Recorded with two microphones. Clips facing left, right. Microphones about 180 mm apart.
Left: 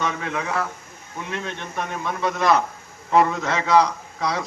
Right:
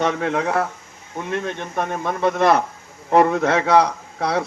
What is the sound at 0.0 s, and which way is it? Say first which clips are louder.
A man's voice: right 6 dB; 55° right (ahead or behind).